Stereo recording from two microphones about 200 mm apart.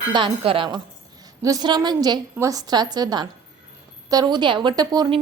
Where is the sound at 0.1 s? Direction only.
25° right (ahead or behind).